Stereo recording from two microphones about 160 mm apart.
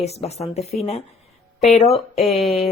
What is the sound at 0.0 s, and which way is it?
Speech, 40° left (ahead or behind).